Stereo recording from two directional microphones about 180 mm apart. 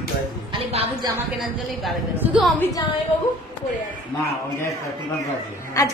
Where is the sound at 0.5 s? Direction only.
35° right (ahead or behind).